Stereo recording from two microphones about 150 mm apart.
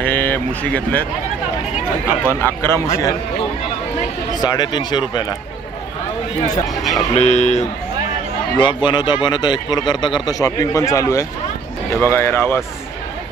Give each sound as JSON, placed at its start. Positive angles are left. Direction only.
{"t": 0.0, "sound": "a sound", "side_deg": 10}
{"t": 2.4, "sound": "a man's voice", "side_deg": 20}
{"t": 4.4, "sound": "a man's voice", "side_deg": 25}
{"t": 6.8, "sound": "speech", "side_deg": 0}
{"t": 7.2, "sound": "speech", "side_deg": 50}
{"t": 8.5, "sound": "a man's voice", "side_deg": 30}